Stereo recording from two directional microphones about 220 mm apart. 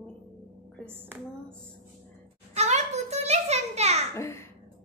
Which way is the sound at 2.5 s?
30° right (ahead or behind).